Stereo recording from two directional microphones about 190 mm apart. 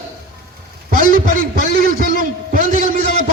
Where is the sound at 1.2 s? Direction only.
45° right (ahead or behind).